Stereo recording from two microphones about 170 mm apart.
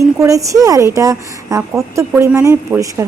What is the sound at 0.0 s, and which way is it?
A woman's voice, 20° right (ahead or behind).